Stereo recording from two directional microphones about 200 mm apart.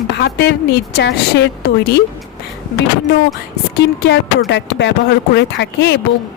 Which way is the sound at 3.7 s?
55° left (ahead or behind).